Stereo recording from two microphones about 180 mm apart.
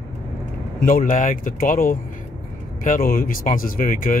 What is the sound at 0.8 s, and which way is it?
Speech, 50° left (ahead or behind).